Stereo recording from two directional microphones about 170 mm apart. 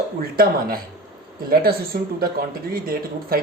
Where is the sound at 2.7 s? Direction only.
60° right (ahead or behind).